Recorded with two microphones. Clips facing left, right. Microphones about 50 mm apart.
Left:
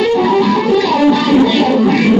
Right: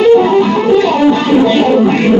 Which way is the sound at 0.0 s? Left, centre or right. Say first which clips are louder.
Right 4 dB; centre.